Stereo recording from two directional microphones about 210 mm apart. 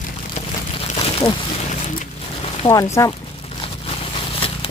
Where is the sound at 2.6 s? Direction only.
15° left (ahead or behind).